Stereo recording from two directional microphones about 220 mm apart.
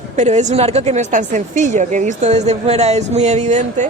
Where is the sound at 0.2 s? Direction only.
30° right (ahead or behind).